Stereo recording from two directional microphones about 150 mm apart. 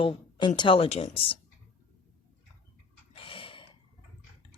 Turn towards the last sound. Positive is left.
turn(degrees=35)  # may be behind; listen again after turning